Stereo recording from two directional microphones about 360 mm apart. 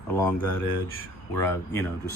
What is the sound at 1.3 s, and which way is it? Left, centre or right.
Speech, centre.